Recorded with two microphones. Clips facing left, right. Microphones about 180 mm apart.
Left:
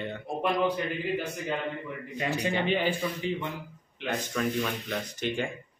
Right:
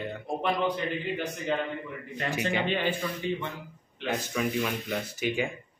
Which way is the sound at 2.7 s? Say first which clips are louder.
Left 1 dB; 10° left (ahead or behind).